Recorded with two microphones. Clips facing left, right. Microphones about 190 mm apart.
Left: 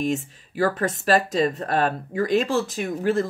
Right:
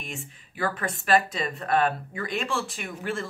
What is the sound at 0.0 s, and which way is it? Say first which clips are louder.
Speech: left 14 dB; 40° left (ahead or behind).